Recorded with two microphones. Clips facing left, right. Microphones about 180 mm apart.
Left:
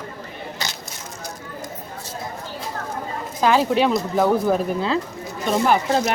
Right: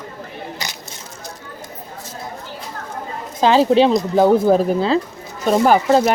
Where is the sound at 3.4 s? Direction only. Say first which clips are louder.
Right 5 dB; 25° right (ahead or behind).